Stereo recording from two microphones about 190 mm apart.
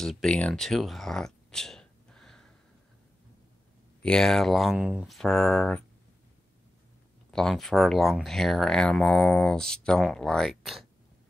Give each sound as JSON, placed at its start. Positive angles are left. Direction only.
{"t": 0.0, "sound": "speech", "side_deg": 0}
{"t": 4.0, "sound": "speech", "side_deg": 5}
{"t": 7.2, "sound": "speech", "side_deg": 5}